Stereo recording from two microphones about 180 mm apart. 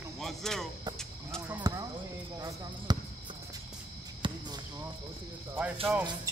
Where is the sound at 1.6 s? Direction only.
20° right (ahead or behind).